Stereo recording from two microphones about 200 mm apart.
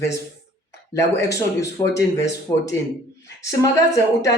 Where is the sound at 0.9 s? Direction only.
15° left (ahead or behind).